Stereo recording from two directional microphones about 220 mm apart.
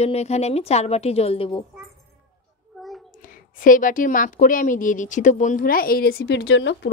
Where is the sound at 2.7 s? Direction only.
Centre (ahead or behind).